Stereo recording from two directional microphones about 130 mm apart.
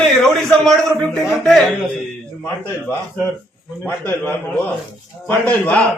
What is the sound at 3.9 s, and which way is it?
A man's voice, 15° left (ahead or behind).